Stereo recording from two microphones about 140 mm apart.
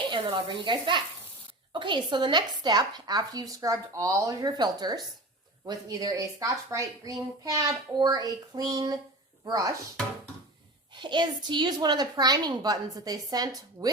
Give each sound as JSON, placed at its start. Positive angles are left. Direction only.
{"t": 0.0, "sound": "a woman's voice", "side_deg": -35}
{"t": 10.9, "sound": "a woman's voice", "side_deg": -35}